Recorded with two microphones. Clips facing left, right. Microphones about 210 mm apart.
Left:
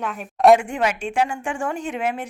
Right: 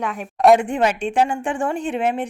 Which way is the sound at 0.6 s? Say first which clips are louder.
Right 4 dB; 35° right (ahead or behind).